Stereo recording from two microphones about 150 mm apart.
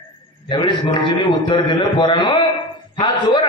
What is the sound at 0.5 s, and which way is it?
A man's voice, 30° left (ahead or behind).